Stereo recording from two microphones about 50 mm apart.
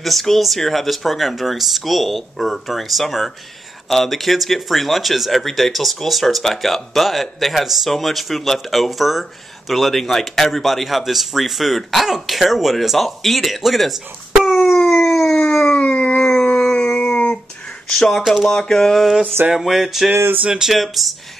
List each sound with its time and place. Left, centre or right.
0.0 s speech: centre
14.3 s dog: centre
14.8 s howl: centre
15.6 s howl: left
16.9 s dog: left
17.9 s speech: centre
18.5 s a sound: centre
19.5 s speech: centre